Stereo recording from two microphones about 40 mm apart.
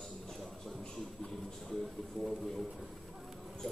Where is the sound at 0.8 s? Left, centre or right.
Centre.